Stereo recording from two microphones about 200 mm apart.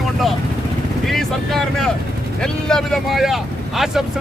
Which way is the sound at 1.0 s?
Centre (ahead or behind).